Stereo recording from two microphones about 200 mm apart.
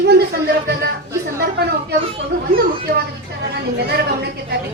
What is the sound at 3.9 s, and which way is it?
Speech, 55° right (ahead or behind).